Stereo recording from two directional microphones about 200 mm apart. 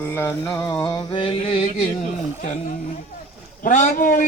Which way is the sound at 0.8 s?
20° left (ahead or behind).